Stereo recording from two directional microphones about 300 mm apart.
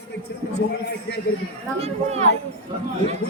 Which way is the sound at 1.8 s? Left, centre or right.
Right.